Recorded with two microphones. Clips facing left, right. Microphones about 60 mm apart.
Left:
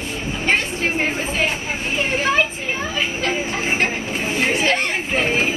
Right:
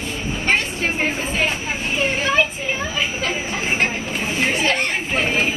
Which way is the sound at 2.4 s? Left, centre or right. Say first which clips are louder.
Right 1 dB; left.